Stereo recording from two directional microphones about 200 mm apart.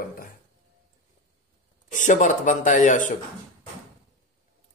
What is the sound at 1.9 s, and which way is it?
Speech, 40° left (ahead or behind).